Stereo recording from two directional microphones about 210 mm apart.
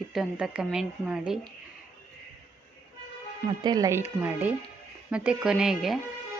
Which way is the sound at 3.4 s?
20° right (ahead or behind).